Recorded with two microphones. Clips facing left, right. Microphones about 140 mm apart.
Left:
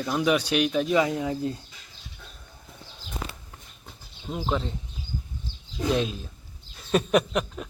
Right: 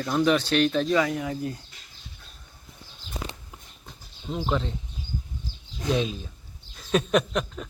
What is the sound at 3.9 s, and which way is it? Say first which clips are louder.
Bird: right 1 dB; 5° left (ahead or behind).